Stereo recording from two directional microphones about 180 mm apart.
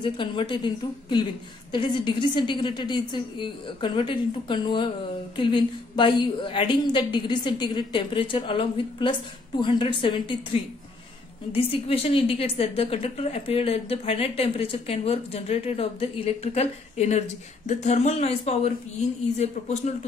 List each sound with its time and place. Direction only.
0.0 s a woman's voice: 25° left (ahead or behind)